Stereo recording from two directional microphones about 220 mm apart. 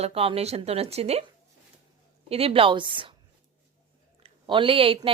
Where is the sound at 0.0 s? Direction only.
25° right (ahead or behind).